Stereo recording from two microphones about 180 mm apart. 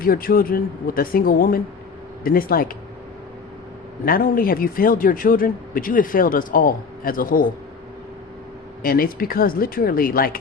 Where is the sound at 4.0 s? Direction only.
55° left (ahead or behind).